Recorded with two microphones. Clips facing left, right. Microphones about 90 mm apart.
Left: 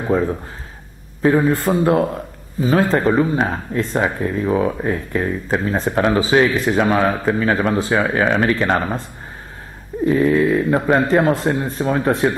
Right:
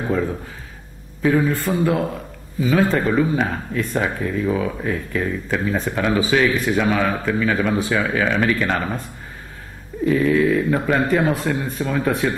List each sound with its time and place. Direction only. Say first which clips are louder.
1.2 s speech: left 3 dB; 35° left (ahead or behind)
10.0 s speech: left 2 dB; 30° left (ahead or behind)